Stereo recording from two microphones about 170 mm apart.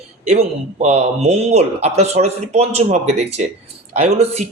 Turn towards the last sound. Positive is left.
turn(degrees=-40)  # may be behind; listen again after turning